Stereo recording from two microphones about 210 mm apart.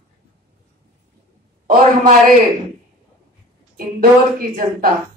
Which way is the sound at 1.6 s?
40° right (ahead or behind).